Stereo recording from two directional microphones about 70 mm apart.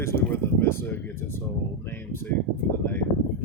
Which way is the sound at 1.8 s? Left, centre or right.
Left.